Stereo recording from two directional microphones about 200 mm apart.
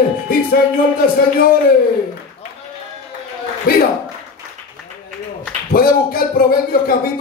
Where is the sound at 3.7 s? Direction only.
45° left (ahead or behind).